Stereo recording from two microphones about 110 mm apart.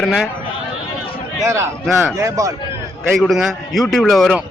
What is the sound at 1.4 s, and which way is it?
A man's voice, 25° right (ahead or behind).